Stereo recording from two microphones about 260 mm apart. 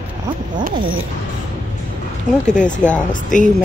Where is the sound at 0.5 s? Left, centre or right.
Right.